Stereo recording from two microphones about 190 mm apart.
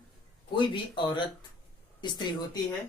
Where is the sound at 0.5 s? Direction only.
25° left (ahead or behind).